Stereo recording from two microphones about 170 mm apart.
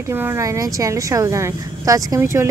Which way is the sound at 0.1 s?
15° right (ahead or behind).